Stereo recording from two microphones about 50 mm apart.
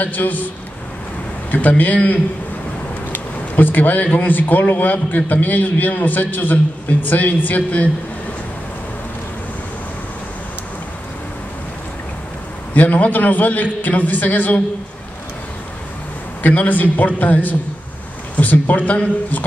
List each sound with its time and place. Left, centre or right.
0.0 s speech: left
1.5 s speech: left
12.7 s speech: left
16.4 s speech: left